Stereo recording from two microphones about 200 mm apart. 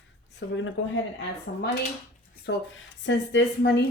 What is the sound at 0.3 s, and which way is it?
Speech, 70° left (ahead or behind).